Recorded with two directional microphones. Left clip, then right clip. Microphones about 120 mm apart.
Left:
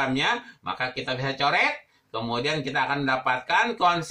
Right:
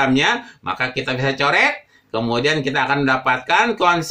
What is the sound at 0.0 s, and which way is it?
Speech, 30° right (ahead or behind).